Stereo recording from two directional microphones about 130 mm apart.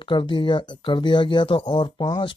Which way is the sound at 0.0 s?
35° left (ahead or behind).